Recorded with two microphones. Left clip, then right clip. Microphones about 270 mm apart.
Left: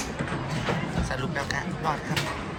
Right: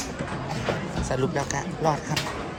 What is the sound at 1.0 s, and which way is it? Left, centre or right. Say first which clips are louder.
Speech: right 7 dB; right.